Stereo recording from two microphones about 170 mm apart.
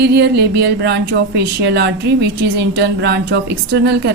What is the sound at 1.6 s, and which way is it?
Speech, 90° right.